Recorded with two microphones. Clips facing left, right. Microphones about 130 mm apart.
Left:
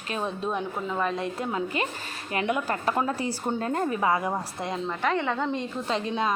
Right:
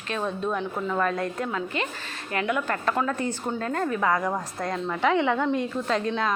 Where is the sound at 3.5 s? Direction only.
25° left (ahead or behind).